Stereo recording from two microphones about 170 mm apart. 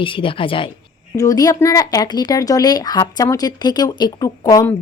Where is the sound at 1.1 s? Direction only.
20° left (ahead or behind).